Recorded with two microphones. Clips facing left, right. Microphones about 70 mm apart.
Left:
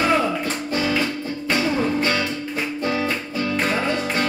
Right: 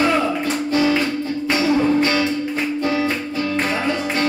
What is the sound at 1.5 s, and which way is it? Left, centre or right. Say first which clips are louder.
Music: right 4 dB; centre.